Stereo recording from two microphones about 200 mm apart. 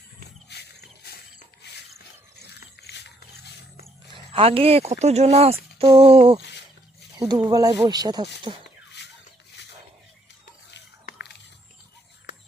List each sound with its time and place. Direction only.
0.5 s wild animals: 55° left (ahead or behind)
1.0 s mechanisms: 50° left (ahead or behind)
2.6 s a sound: 55° left (ahead or behind)
4.1 s speech: 30° right (ahead or behind)
7.2 s speech: 20° right (ahead or behind)
10.8 s a sound: 55° left (ahead or behind)